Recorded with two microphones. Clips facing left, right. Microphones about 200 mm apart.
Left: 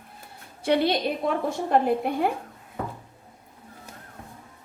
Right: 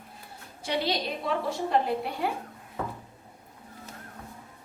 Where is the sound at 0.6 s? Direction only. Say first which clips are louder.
Left 7 dB; 55° left (ahead or behind).